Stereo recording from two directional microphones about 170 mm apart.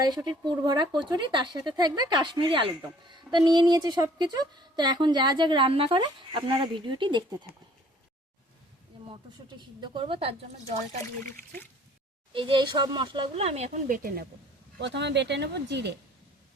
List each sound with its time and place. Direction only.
0.0 s a woman's voice: 25° right (ahead or behind)
9.0 s speech: 30° right (ahead or behind)
12.3 s speech: 30° right (ahead or behind); by 14.3 s 55° right (ahead or behind)
14.8 s speech: 90° right